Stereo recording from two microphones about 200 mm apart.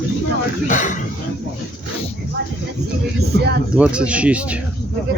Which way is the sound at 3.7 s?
5° right (ahead or behind).